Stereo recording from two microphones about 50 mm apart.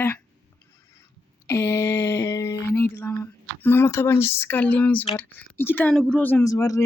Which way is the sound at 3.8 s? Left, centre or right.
Left.